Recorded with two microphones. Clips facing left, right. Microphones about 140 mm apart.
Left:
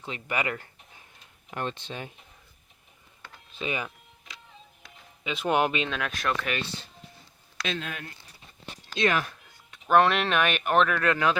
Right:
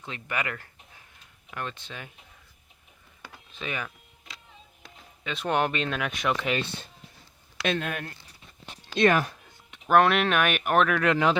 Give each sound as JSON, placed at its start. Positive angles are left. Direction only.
{"t": 0.0, "sound": "speech", "side_deg": 20}
{"t": 3.6, "sound": "speech", "side_deg": 20}
{"t": 5.2, "sound": "a man's voice", "side_deg": 15}
{"t": 5.9, "sound": "speech", "side_deg": -5}
{"t": 7.6, "sound": "speech", "side_deg": -55}
{"t": 9.8, "sound": "speech", "side_deg": -5}
{"t": 11.0, "sound": "speech", "side_deg": -20}